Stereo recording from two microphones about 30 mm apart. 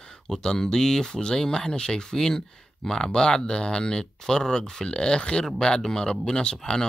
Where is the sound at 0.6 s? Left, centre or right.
Centre.